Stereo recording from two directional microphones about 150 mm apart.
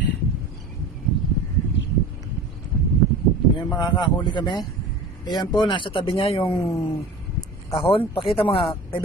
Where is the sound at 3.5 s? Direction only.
30° left (ahead or behind).